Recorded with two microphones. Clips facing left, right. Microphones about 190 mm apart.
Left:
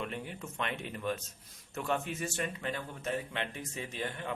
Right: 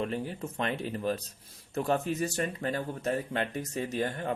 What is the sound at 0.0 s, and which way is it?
Speech, 35° right (ahead or behind).